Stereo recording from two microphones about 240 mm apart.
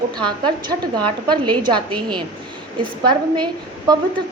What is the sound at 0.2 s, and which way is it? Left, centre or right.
A woman's voice, centre.